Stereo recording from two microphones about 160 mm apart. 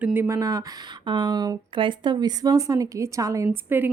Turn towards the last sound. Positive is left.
turn(degrees=-15)  # may be behind; listen again after turning